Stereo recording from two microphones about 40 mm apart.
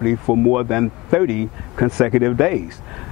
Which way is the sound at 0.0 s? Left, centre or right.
Centre.